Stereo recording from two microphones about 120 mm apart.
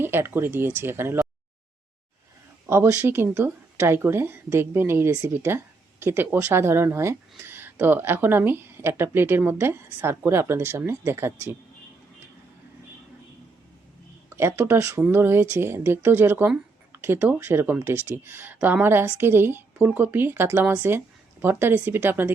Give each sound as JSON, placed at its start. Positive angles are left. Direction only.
{"t": 0.0, "sound": "speech", "side_deg": -20}
{"t": 2.6, "sound": "speech", "side_deg": -20}
{"t": 14.3, "sound": "speech", "side_deg": -20}